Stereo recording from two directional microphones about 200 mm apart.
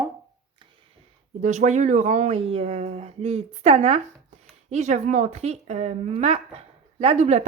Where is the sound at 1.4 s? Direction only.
35° right (ahead or behind).